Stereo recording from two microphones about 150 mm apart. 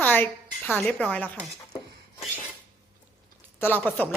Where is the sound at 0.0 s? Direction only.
10° left (ahead or behind).